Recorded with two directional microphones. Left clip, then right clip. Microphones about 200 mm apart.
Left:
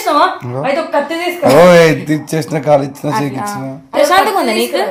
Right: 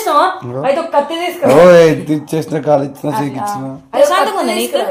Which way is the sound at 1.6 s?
10° left (ahead or behind).